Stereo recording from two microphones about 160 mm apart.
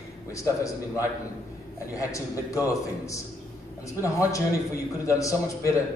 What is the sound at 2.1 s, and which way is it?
A man's voice, 20° left (ahead or behind).